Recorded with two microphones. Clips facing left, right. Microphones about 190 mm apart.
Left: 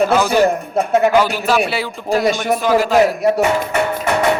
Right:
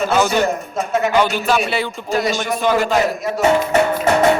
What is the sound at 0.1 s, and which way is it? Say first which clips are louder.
A man's voice: left 3 dB; centre (ahead or behind).